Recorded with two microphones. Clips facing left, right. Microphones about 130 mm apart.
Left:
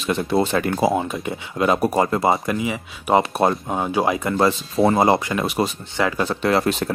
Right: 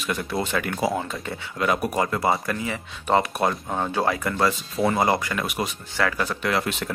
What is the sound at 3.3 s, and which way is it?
Speech, 30° left (ahead or behind).